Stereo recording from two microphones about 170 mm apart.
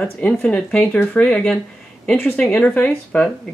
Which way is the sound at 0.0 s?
5° left (ahead or behind).